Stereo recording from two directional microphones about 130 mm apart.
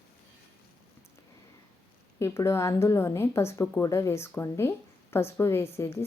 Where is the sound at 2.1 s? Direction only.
20° left (ahead or behind).